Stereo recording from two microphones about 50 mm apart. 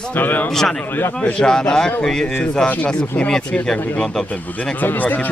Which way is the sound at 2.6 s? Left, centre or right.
Left.